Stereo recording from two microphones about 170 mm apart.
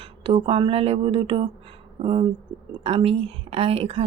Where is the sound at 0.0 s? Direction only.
35° right (ahead or behind).